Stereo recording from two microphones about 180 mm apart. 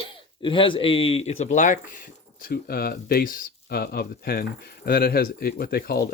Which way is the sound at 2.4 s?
55° left (ahead or behind).